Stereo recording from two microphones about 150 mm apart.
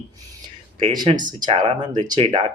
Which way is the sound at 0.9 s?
30° right (ahead or behind).